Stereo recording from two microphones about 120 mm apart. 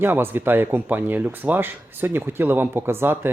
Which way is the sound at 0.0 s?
15° right (ahead or behind).